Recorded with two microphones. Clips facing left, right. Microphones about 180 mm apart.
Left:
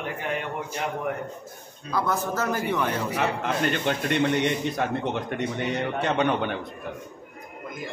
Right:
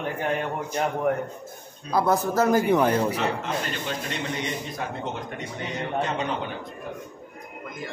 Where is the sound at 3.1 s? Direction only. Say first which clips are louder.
Left 1 dB; 60° left (ahead or behind).